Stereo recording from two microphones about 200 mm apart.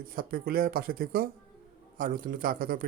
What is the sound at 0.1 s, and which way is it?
A man's voice, 45° right (ahead or behind).